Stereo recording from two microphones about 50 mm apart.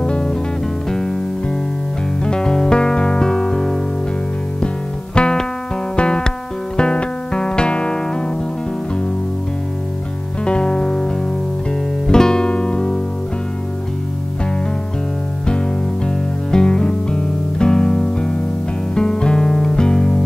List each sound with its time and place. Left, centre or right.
0.0 s music: centre
2.2 s music: centre
5.1 s music: centre
10.4 s music: centre
12.1 s music: centre
16.5 s music: centre